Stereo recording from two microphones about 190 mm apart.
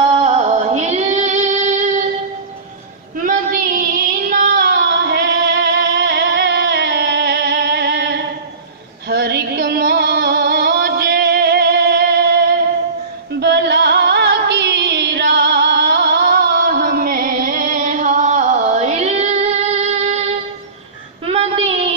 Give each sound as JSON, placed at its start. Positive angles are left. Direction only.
{"t": 0.0, "sound": "music", "side_deg": -35}
{"t": 3.2, "sound": "child singing", "side_deg": -45}
{"t": 4.3, "sound": "music", "side_deg": -45}
{"t": 13.3, "sound": "music", "side_deg": -65}
{"t": 21.3, "sound": "child singing", "side_deg": -30}